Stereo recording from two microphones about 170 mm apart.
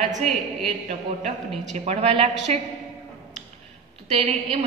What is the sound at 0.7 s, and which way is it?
A man's voice, 40° right (ahead or behind).